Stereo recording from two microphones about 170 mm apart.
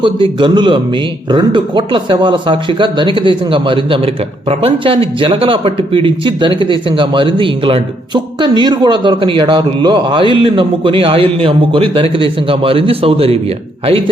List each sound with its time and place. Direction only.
0.0 s a man's voice: 30° right (ahead or behind)